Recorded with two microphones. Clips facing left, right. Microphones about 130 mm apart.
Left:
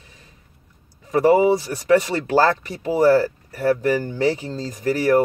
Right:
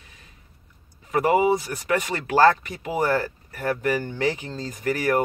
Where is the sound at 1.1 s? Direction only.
35° left (ahead or behind).